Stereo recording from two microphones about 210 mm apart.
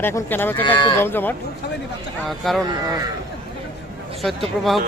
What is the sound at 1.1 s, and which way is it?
Speech, 10° left (ahead or behind).